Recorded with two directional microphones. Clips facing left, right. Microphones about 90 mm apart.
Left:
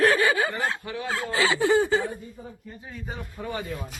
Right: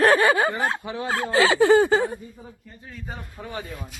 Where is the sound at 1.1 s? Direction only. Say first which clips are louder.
Right 5 dB; 60° right (ahead or behind); by 2.0 s 85° right.